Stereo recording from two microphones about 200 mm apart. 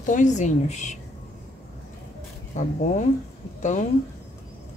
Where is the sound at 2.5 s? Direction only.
35° left (ahead or behind).